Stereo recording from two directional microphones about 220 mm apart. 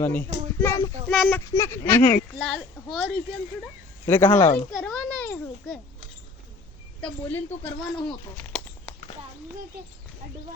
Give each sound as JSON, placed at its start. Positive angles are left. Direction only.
{"t": 0.0, "sound": "speech", "side_deg": 10}
{"t": 4.4, "sound": "a child's voice", "side_deg": 25}
{"t": 4.7, "sound": "a child's voice", "side_deg": 0}
{"t": 7.0, "sound": "speech", "side_deg": 10}
{"t": 8.4, "sound": "a sound", "side_deg": 5}